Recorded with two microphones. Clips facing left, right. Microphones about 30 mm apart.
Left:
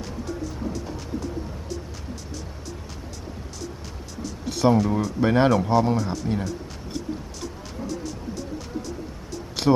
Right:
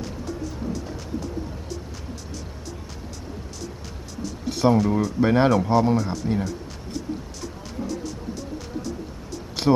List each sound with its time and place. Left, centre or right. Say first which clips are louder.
4.2 s speech: even; centre
7.8 s music: right 2 dB; right
9.6 s a sound: even; centre